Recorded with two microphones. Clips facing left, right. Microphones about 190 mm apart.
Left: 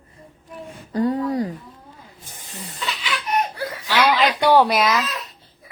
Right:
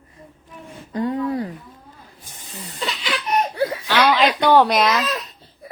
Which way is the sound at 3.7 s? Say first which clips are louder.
Left 2 dB; 25° right (ahead or behind).